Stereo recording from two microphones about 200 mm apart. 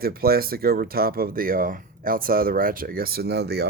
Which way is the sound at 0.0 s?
50° right (ahead or behind).